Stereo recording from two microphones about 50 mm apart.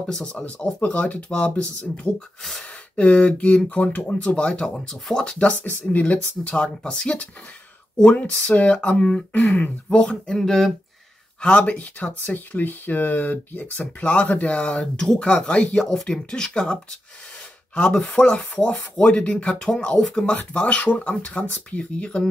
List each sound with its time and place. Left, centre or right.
0.0 s speech: centre
0.7 s speech: left
4.4 s speech: centre
5.6 s speech: left
6.5 s speech: centre
8.0 s speech: left
8.9 s speech: centre
11.4 s speech: left
18.0 s speech: left
20.3 s speech: left